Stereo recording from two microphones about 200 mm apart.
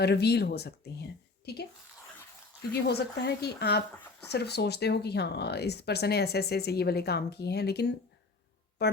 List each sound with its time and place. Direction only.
0.0 s speech: 55° left (ahead or behind)
2.8 s speech: 55° left (ahead or behind)